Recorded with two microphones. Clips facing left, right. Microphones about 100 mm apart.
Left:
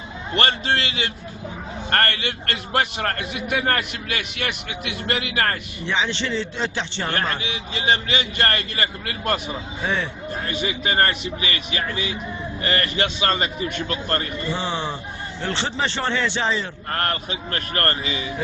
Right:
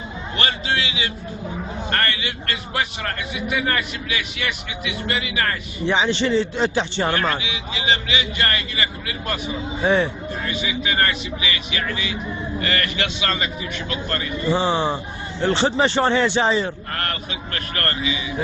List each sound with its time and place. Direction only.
0.3 s speech: 50° left (ahead or behind)
5.9 s a man's voice: 15° right (ahead or behind)
7.4 s speech: 45° left (ahead or behind)
9.8 s speech: 20° right (ahead or behind)
10.4 s a man's voice: 45° left (ahead or behind)
11.8 s a man's voice: 30° left (ahead or behind)
14.5 s speech: 25° right (ahead or behind)
15.5 s a man's voice: 15° right (ahead or behind)
16.9 s a man's voice: 35° left (ahead or behind)